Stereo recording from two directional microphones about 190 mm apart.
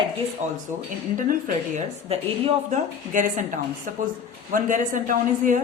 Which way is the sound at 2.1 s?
35° right (ahead or behind).